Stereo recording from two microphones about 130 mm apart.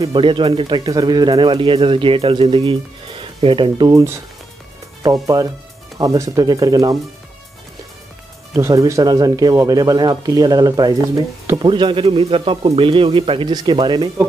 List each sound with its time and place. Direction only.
0.1 s speech: 40° right (ahead or behind)
5.0 s speech: 25° right (ahead or behind)
8.5 s speech: 25° right (ahead or behind); by 13.5 s 45° right (ahead or behind)
13.5 s speech: 35° right (ahead or behind)